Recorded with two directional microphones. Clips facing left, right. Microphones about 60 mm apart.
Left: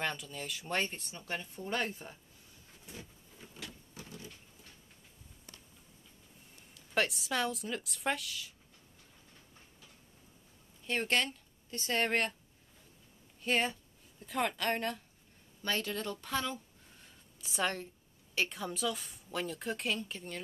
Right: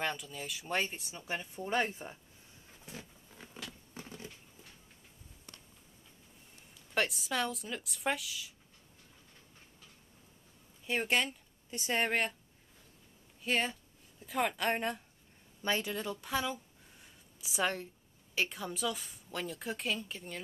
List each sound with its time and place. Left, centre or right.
0.0 s speech: centre
3.9 s a sound: right
6.7 s a woman's voice: centre
10.9 s speech: centre
13.4 s a woman's voice: centre
14.6 s a woman's voice: centre